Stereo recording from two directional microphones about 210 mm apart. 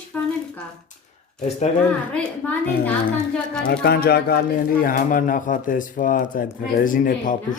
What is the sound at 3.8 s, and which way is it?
Speech, 50° left (ahead or behind).